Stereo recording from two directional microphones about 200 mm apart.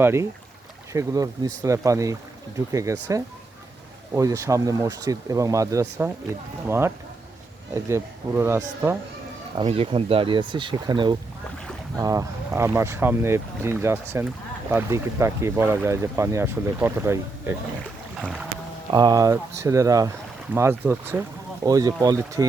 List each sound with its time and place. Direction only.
0.0 s speech: 10° right (ahead or behind)
9.6 s speech: 30° right (ahead or behind); by 17.5 s 10° right (ahead or behind)
18.9 s speech: 20° right (ahead or behind)